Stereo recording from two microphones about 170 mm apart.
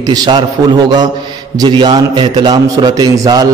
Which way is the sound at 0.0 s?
20° right (ahead or behind).